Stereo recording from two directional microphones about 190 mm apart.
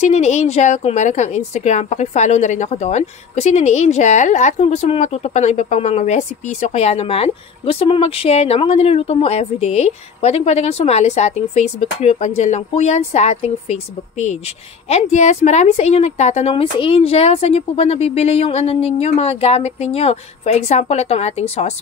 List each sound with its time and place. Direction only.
0.0 s a woman's voice: 35° left (ahead or behind)